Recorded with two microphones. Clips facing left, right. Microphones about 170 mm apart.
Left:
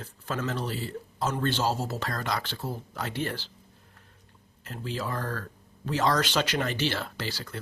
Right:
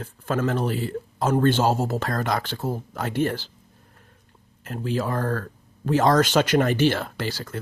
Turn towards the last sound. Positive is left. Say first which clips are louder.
# right 6 dB
turn(degrees=-50)  # may be behind; listen again after turning